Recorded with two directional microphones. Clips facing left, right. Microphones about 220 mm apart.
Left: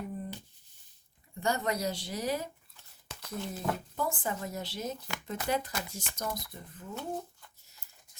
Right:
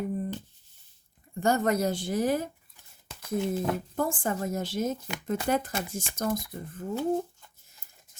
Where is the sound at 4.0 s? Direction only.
50° right (ahead or behind).